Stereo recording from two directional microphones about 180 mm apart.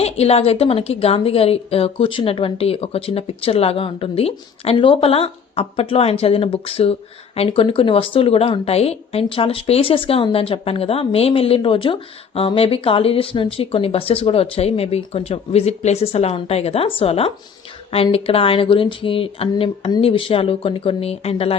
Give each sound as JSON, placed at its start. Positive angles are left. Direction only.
{"t": 0.0, "sound": "a woman's voice", "side_deg": 35}